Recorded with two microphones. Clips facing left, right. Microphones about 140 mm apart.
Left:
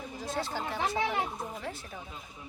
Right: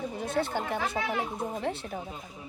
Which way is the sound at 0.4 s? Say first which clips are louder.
Right 4 dB; 55° right (ahead or behind).